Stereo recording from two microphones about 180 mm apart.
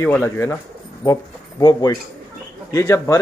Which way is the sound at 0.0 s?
15° left (ahead or behind).